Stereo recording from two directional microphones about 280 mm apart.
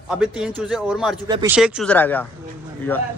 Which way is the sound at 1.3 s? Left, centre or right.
Centre.